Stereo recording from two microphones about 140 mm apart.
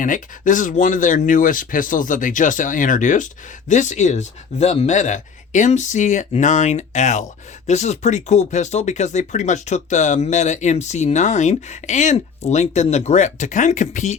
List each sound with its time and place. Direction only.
0.0 s speech: 65° left (ahead or behind)